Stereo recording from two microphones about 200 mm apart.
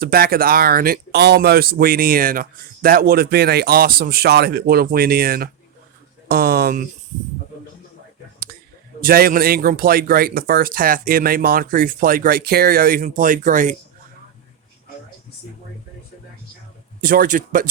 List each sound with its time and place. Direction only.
0.0 s speech: 50° right (ahead or behind)
9.0 s speech: 45° right (ahead or behind)
17.0 s speech: 45° right (ahead or behind)